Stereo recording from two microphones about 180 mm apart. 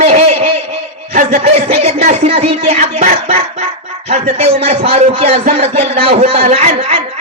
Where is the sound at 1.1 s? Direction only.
50° right (ahead or behind).